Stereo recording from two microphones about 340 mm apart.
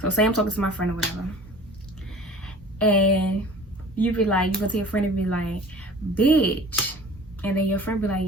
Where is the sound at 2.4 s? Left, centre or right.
Centre.